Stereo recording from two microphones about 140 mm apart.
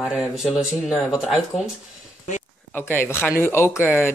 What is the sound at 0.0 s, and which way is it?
Speech, 5° right (ahead or behind).